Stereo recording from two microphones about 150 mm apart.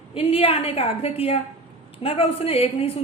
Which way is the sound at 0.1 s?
40° left (ahead or behind).